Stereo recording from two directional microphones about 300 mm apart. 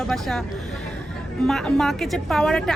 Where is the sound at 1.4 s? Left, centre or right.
Centre.